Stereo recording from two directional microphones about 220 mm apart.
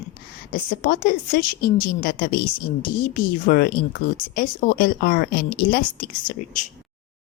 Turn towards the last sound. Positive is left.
turn(degrees=35)  # may be behind; listen again after turning